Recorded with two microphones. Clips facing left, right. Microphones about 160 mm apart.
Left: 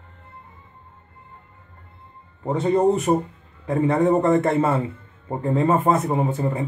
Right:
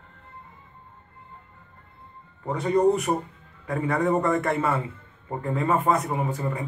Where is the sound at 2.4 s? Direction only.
25° left (ahead or behind).